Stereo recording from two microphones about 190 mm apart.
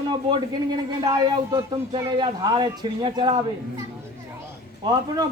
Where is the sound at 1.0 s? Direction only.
15° right (ahead or behind).